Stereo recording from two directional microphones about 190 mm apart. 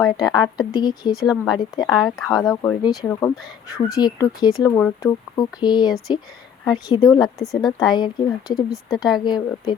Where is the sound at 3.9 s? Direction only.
20° left (ahead or behind).